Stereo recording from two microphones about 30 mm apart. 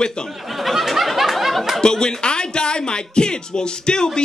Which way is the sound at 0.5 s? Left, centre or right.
Centre.